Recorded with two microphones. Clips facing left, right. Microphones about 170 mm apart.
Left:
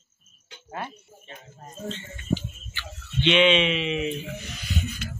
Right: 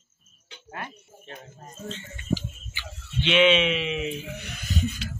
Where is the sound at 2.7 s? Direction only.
5° right (ahead or behind).